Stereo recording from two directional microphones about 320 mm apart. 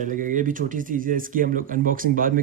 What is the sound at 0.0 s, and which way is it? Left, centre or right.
Speech, right.